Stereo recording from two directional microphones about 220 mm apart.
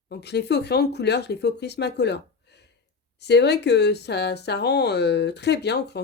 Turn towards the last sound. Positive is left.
turn(degrees=50)  # may be behind; listen again after turning